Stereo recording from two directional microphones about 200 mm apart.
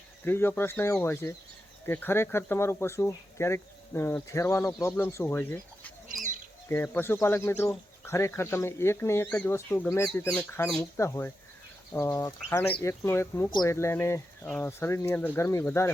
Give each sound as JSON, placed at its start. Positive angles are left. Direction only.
{"t": 0.3, "sound": "speech", "side_deg": 10}
{"t": 6.1, "sound": "bird", "side_deg": -40}
{"t": 6.7, "sound": "speech", "side_deg": 10}
{"t": 14.4, "sound": "speech", "side_deg": 0}
{"t": 14.7, "sound": "speech", "side_deg": 15}